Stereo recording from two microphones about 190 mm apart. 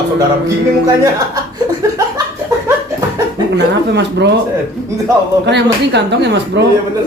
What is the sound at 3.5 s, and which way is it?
Speech, 65° right (ahead or behind).